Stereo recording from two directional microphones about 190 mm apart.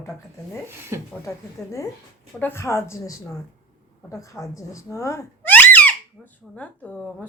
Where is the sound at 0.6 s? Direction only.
15° right (ahead or behind).